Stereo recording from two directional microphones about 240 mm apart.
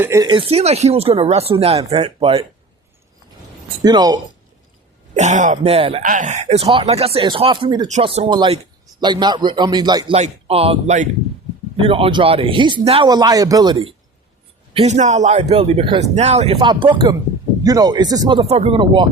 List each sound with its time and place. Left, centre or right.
0.0 s speech: centre
3.8 s speech: centre
5.1 s speech: right